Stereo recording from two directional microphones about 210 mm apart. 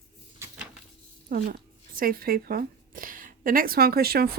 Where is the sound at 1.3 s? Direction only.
45° right (ahead or behind).